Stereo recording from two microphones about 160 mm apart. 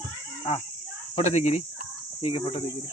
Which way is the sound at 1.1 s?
45° left (ahead or behind).